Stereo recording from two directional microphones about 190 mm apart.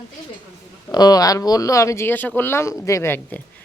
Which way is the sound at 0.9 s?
20° left (ahead or behind).